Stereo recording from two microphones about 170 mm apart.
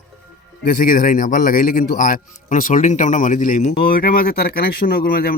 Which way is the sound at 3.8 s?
60° left (ahead or behind).